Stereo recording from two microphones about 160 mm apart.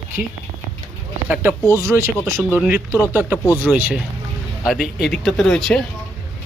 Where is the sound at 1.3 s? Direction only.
10° right (ahead or behind).